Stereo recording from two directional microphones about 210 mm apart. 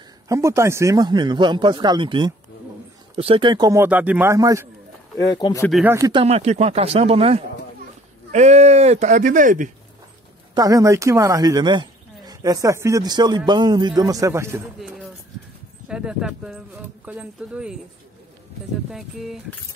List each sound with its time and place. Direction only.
0.3 s speech: 15° right (ahead or behind)
5.1 s speech: 15° left (ahead or behind)
5.7 s speech: centre (ahead or behind)
5.9 s speech: 15° right (ahead or behind)
6.2 s speech: 30° right (ahead or behind)
10.5 s speech: 15° right (ahead or behind)
18.9 s speech: centre (ahead or behind)